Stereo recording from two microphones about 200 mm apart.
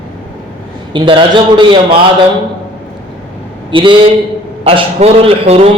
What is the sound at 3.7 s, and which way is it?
A man's voice, 25° right (ahead or behind).